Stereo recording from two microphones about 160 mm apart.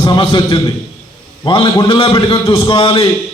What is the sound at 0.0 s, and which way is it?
A man's voice, 30° left (ahead or behind).